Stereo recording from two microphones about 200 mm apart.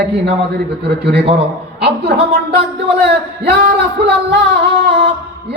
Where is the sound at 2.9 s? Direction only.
55° right (ahead or behind).